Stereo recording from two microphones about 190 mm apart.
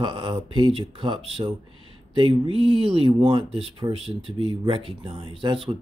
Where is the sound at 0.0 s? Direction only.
25° right (ahead or behind).